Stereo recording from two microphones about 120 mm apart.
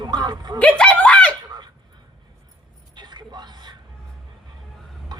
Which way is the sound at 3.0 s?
35° right (ahead or behind).